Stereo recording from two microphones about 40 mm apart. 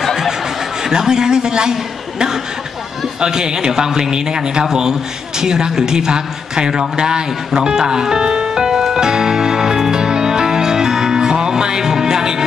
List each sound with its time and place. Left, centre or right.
0.0 s snicker: centre
0.8 s a man's voice: centre
5.4 s a sound: centre